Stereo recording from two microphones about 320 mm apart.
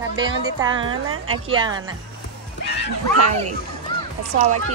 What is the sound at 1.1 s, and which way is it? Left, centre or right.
Speech, right.